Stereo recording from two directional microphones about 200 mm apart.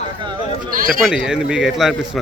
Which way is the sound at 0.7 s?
45° right (ahead or behind).